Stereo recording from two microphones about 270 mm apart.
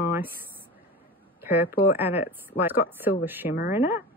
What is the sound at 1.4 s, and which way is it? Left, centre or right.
Speech, centre.